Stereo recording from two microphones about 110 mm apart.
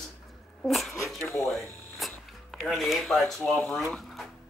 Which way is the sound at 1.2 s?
25° left (ahead or behind).